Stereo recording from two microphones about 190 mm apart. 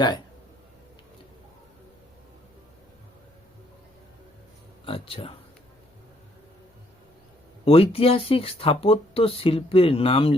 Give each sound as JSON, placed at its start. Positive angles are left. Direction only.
{"t": 4.9, "sound": "speech", "side_deg": 30}
{"t": 7.6, "sound": "speech", "side_deg": 30}